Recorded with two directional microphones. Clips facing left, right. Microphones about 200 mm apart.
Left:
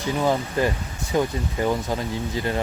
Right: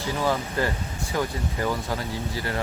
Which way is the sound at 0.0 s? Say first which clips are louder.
Left 3 dB; 20° left (ahead or behind).